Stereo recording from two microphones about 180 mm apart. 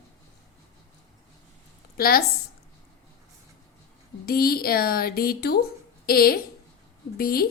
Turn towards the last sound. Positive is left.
turn(degrees=55)  # may be behind; listen again after turning